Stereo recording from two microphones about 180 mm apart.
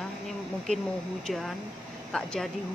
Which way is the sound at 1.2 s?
Centre (ahead or behind).